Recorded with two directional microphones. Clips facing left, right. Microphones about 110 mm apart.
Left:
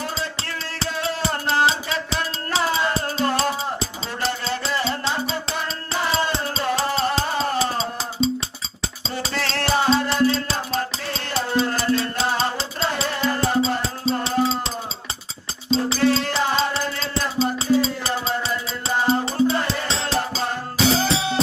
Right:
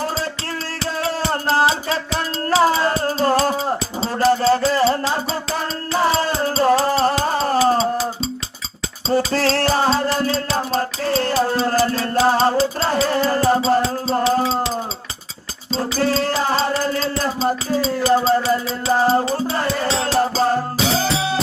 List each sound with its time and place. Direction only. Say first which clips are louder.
0.9 s music: right 4 dB; 40° right (ahead or behind)
4.0 s a sound: right 13 dB; 40° right (ahead or behind)
5.5 s music: right 5 dB; 40° right (ahead or behind)
15.7 s music: left 1 dB; 40° right (ahead or behind)